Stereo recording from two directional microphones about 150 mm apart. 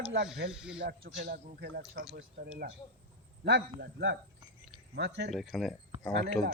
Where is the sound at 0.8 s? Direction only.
90° right.